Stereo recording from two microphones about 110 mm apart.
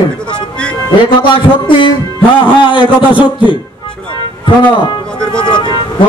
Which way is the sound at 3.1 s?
15° right (ahead or behind).